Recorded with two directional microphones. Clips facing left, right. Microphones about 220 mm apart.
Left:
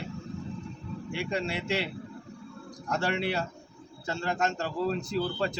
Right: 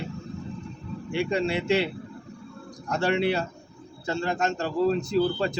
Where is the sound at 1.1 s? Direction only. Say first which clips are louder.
Right 7 dB; 25° right (ahead or behind).